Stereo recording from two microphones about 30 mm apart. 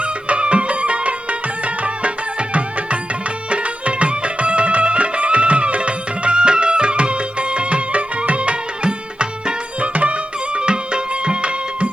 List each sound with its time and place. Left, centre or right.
0.0 s music: right
9.9 s music: right
10.6 s music: right